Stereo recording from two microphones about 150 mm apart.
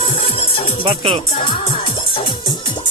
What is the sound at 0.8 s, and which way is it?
Speech, 40° right (ahead or behind).